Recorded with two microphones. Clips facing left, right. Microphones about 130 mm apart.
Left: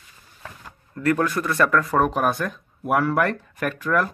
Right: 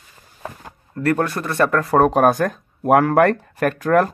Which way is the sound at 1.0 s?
40° right (ahead or behind).